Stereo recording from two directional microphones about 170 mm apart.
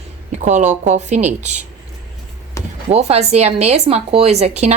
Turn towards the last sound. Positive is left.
turn(degrees=-40)  # may be behind; listen again after turning